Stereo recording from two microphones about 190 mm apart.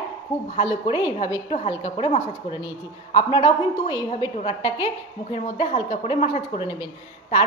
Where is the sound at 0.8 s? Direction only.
25° left (ahead or behind).